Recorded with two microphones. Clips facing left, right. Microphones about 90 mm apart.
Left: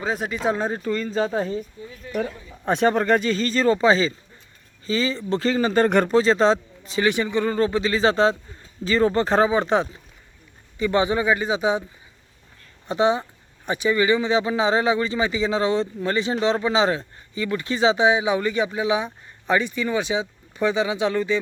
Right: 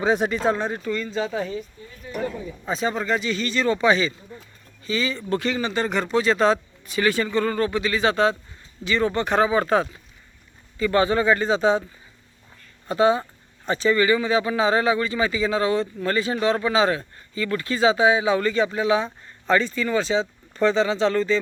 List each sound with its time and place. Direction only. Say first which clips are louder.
0.0 s speech: right 5 dB; centre (ahead or behind)
0.6 s speech: left 2 dB; 35° left (ahead or behind)
2.0 s a sound: left 4 dB; 15° right (ahead or behind)
2.6 s speech: left 6 dB; 60° left (ahead or behind)
6.1 s speech: right 1 dB; 30° left (ahead or behind)
9.5 s a man's voice: even; 20° left (ahead or behind)
12.9 s speech: right 1 dB; 20° left (ahead or behind)